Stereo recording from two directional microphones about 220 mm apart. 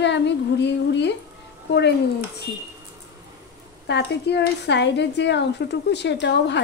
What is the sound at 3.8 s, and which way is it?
A woman's voice, 50° left (ahead or behind).